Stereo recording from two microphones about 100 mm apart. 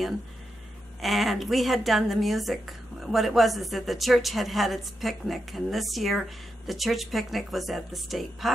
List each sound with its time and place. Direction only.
1.0 s a woman's voice: centre (ahead or behind)